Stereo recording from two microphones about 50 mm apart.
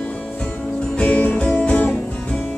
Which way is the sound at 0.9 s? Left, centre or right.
Left.